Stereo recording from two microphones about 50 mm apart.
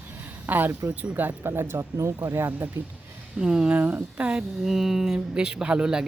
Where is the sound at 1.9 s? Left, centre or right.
Right.